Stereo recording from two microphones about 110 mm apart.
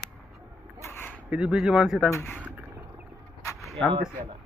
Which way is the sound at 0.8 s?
20° left (ahead or behind).